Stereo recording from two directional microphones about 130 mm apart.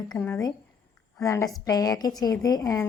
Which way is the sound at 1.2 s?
25° left (ahead or behind).